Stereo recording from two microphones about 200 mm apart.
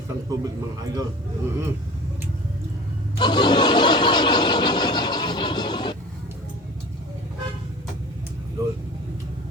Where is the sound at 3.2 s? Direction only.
20° left (ahead or behind).